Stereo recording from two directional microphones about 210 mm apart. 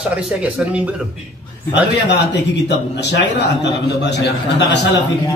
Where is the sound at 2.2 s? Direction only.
55° left (ahead or behind).